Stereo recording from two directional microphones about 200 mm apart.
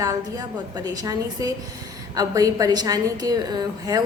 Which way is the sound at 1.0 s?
15° right (ahead or behind).